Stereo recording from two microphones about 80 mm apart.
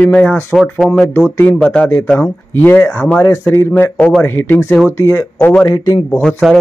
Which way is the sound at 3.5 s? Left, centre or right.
Left.